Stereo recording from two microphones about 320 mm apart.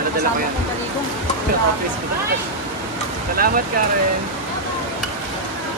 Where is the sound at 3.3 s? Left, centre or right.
Right.